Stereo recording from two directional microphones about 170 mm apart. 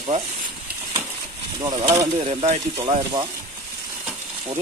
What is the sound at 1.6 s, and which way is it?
Speech, 25° right (ahead or behind).